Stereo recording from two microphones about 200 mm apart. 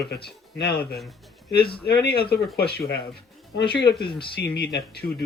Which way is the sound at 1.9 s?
50° left (ahead or behind).